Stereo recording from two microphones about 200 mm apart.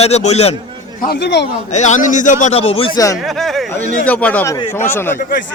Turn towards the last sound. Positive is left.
turn(degrees=10)  # may be behind; listen again after turning